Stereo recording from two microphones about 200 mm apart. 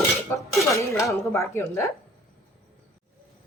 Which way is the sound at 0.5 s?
15° left (ahead or behind).